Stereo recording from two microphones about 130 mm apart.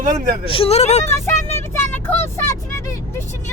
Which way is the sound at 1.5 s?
20° left (ahead or behind).